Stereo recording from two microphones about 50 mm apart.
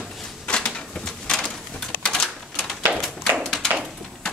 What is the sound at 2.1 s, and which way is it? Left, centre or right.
Typewriter, centre.